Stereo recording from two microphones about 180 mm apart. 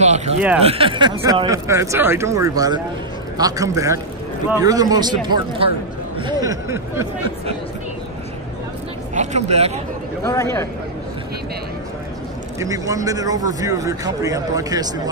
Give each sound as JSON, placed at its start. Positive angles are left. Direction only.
{"t": 0.0, "sound": "a sound", "side_deg": -40}
{"t": 0.6, "sound": "speech", "side_deg": -35}
{"t": 9.1, "sound": "speech", "side_deg": -40}
{"t": 10.2, "sound": "a man's voice", "side_deg": 15}
{"t": 12.5, "sound": "speech", "side_deg": -20}